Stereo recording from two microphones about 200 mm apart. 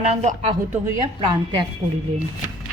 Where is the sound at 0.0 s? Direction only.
30° right (ahead or behind).